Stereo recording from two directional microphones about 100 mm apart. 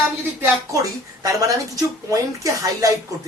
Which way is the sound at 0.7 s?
35° right (ahead or behind).